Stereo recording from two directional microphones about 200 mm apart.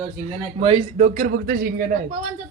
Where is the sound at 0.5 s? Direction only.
30° right (ahead or behind).